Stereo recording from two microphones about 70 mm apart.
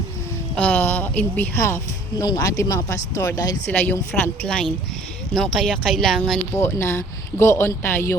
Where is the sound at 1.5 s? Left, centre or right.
Left.